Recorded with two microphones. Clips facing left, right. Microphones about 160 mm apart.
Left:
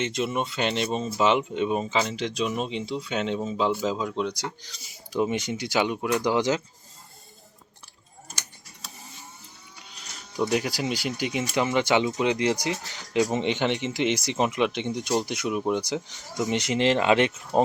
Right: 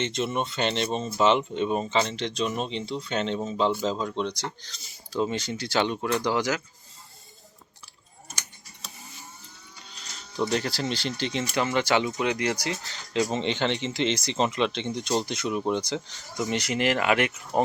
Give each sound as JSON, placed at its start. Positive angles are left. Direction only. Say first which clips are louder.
{"t": 0.0, "sound": "speech", "louder": "left 1 dB", "side_deg": 5}
{"t": 10.4, "sound": "speech", "louder": "left 1 dB", "side_deg": 10}